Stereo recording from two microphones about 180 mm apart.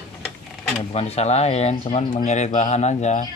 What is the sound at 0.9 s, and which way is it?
Speech, 35° left (ahead or behind).